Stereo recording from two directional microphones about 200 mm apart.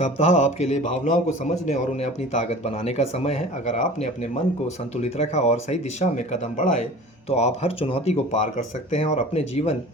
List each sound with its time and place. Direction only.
0.0 s a man's voice: 35° left (ahead or behind)